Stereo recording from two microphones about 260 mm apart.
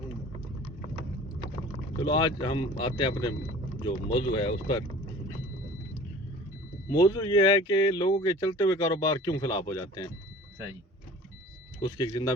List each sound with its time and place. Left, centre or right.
2.0 s speech: centre
6.9 s speech: centre
11.8 s speech: centre